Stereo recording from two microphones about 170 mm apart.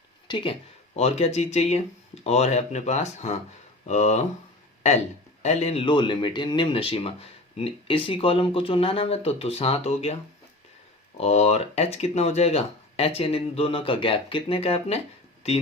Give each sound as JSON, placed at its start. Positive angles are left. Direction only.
{"t": 0.3, "sound": "speech", "side_deg": 25}
{"t": 0.9, "sound": "speech", "side_deg": 40}
{"t": 5.4, "sound": "speech", "side_deg": 40}
{"t": 11.2, "sound": "speech", "side_deg": 40}